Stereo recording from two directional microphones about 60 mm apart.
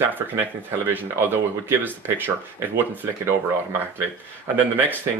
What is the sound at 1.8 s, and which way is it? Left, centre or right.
Speech, right.